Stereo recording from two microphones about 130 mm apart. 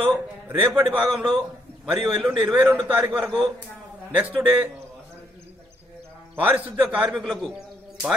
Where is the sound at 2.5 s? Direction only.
15° right (ahead or behind).